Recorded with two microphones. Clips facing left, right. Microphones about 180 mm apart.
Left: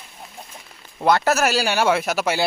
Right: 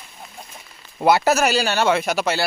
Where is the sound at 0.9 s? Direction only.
5° right (ahead or behind).